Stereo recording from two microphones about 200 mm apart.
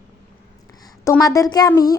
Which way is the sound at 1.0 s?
15° left (ahead or behind).